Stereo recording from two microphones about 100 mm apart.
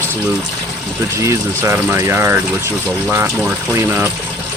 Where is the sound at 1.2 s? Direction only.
30° right (ahead or behind).